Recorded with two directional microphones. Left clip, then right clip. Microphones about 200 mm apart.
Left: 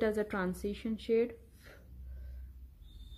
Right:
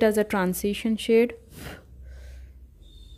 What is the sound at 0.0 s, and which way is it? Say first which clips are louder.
Speech: right 11 dB; 30° right (ahead or behind).